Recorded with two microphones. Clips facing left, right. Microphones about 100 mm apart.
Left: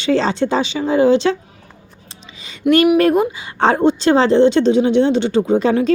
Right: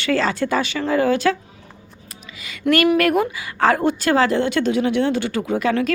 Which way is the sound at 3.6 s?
25° left (ahead or behind).